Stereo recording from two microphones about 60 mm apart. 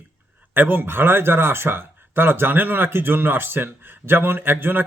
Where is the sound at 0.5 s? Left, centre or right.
Right.